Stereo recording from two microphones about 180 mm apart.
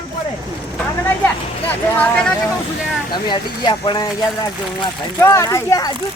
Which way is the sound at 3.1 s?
25° left (ahead or behind).